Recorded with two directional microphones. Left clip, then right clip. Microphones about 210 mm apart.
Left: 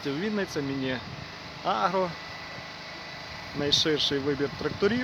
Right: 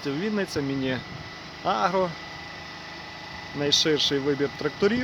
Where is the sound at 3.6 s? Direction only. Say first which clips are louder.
Right 3 dB; 10° right (ahead or behind).